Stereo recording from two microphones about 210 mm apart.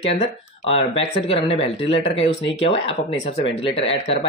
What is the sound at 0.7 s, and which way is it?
Speech, 25° left (ahead or behind).